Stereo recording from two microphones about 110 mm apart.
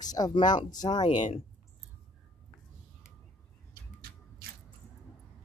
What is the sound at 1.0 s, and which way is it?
Speech, 80° left.